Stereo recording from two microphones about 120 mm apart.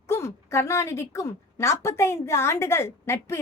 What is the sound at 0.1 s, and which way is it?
Speech, 25° left (ahead or behind).